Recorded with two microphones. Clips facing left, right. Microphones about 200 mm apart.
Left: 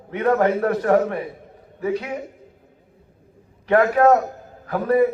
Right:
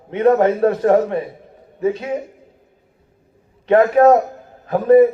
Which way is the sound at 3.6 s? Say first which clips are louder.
Right 4 dB; 25° right (ahead or behind).